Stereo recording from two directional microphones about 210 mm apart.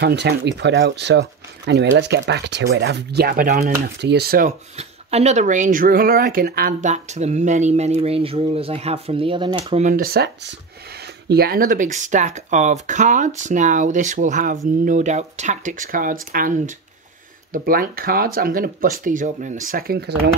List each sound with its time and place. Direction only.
0.0 s speech: 50° right (ahead or behind)
4.5 s speech: 30° right (ahead or behind)